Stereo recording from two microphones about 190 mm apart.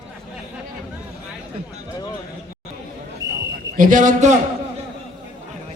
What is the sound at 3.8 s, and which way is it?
Speech, 45° right (ahead or behind).